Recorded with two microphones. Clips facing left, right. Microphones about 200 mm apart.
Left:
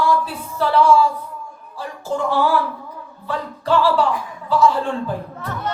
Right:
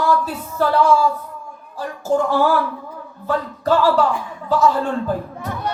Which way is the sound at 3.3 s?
45° right (ahead or behind).